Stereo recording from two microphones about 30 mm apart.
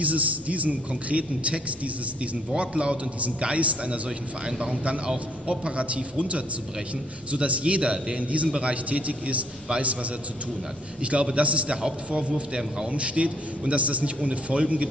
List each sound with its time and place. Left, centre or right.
0.0 s a man's voice: right
3.2 s a man's voice: right
4.5 s a man's voice: right
8.2 s a man's voice: right
11.0 s a man's voice: right
12.5 s a man's voice: right
12.9 s a man's voice: right